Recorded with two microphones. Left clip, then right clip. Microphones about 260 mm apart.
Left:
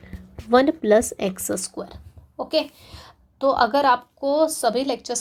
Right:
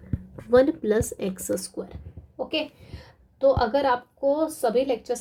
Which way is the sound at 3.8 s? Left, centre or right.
Left.